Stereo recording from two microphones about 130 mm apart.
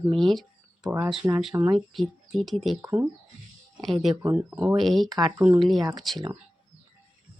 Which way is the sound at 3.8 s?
Centre (ahead or behind).